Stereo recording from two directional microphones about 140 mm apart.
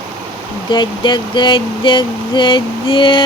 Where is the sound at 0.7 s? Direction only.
35° left (ahead or behind).